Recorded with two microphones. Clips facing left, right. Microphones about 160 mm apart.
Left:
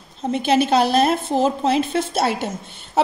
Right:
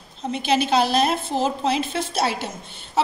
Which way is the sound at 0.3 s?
50° left (ahead or behind).